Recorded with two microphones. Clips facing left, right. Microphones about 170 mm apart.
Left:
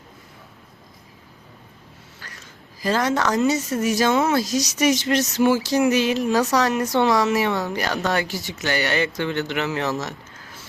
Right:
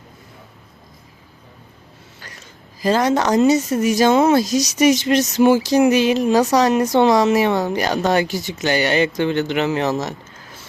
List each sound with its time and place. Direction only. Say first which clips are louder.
2.8 s speech: right 4 dB; 15° right (ahead or behind)